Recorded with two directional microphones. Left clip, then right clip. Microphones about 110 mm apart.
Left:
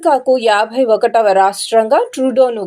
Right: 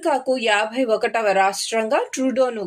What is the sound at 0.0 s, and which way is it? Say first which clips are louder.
A woman's voice: left 8 dB; 20° left (ahead or behind).